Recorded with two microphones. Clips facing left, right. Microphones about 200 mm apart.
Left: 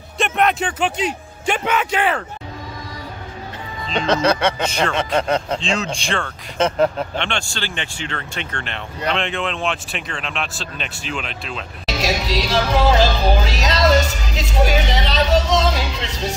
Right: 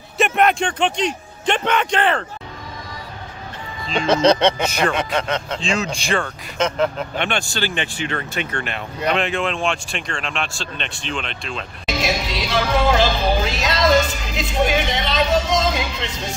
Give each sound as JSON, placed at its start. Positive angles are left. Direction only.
{"t": 0.2, "sound": "a man's voice", "side_deg": 0}
{"t": 4.0, "sound": "speech", "side_deg": -15}
{"t": 4.9, "sound": "speech", "side_deg": 35}
{"t": 5.7, "sound": "speech", "side_deg": 0}
{"t": 12.0, "sound": "speech", "side_deg": 40}